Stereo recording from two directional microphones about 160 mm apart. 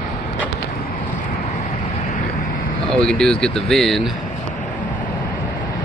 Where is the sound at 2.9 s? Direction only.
5° left (ahead or behind).